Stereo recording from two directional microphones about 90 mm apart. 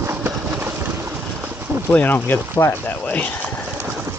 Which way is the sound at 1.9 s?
20° left (ahead or behind).